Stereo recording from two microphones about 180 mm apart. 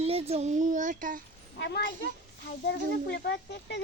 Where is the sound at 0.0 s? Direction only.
35° right (ahead or behind).